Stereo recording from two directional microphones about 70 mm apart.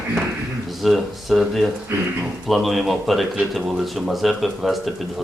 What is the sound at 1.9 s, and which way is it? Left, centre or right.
Speech, right.